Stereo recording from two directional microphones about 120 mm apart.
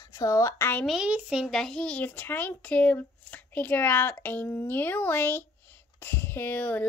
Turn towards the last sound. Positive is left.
turn(degrees=15)  # may be behind; listen again after turning